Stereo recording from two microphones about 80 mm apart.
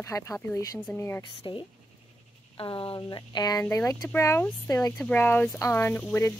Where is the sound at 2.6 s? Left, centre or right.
Left.